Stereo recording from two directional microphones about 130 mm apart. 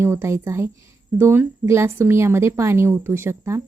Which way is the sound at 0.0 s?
20° right (ahead or behind).